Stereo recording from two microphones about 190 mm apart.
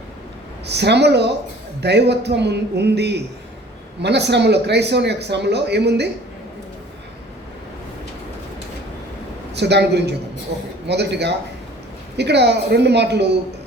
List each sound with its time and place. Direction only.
0.7 s speech: 60° right (ahead or behind)
9.6 s speech: 60° right (ahead or behind)